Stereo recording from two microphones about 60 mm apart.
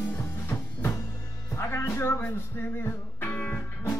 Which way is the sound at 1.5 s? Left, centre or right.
Left.